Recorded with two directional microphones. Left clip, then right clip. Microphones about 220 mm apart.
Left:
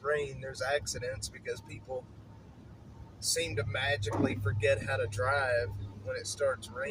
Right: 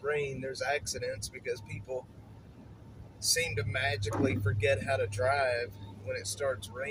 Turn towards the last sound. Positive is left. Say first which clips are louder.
# left 2 dB
turn(degrees=-15)  # may be behind; listen again after turning